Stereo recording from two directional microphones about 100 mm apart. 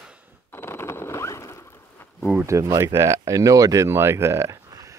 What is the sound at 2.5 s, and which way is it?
Speech, 35° right (ahead or behind).